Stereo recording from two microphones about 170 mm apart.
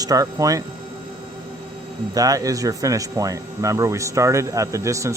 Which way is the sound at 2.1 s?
20° right (ahead or behind).